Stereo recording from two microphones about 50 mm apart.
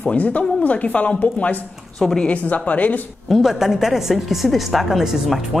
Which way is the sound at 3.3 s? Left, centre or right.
Centre.